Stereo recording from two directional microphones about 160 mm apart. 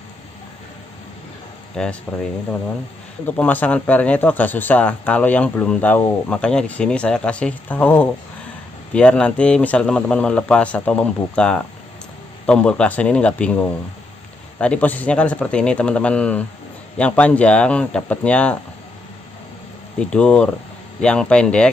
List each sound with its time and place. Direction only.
1.8 s speech: 5° left (ahead or behind)
3.3 s speech: 10° left (ahead or behind)
20.0 s speech: 5° left (ahead or behind)